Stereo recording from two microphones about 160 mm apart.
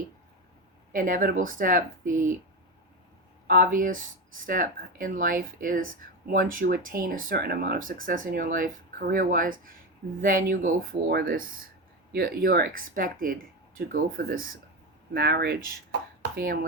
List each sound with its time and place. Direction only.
0.9 s speech: 60° right (ahead or behind)
3.4 s speech: 60° right (ahead or behind)
11.1 s speech: 75° right (ahead or behind)
15.1 s speech: 85° right
16.3 s speech: 65° right (ahead or behind)